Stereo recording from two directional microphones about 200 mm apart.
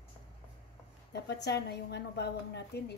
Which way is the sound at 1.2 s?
55° left (ahead or behind).